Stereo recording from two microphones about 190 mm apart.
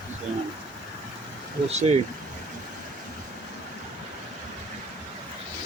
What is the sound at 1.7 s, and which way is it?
Speech, 35° right (ahead or behind).